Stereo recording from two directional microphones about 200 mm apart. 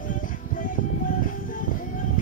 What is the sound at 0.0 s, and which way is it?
Music, 40° left (ahead or behind).